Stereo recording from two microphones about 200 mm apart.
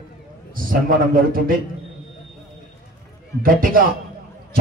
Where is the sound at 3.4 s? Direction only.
45° right (ahead or behind).